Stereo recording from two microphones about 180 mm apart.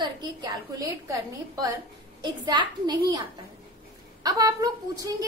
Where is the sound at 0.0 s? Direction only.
25° right (ahead or behind).